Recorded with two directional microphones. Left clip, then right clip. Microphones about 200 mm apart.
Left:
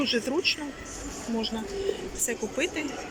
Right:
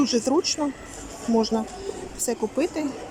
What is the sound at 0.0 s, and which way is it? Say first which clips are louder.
Speech: right 4 dB; 30° right (ahead or behind).